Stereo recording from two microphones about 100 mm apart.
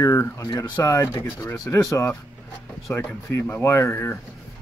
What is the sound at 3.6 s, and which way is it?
Speech, 25° left (ahead or behind).